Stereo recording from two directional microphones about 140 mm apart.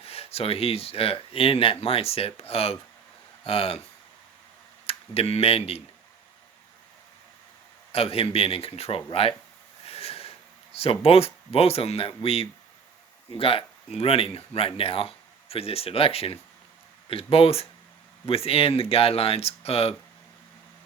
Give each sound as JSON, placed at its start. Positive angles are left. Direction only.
{"t": 0.0, "sound": "speech", "side_deg": 45}
{"t": 4.9, "sound": "speech", "side_deg": 45}
{"t": 7.9, "sound": "speech", "side_deg": 45}
{"t": 9.8, "sound": "a sound", "side_deg": 45}
{"t": 10.8, "sound": "speech", "side_deg": 45}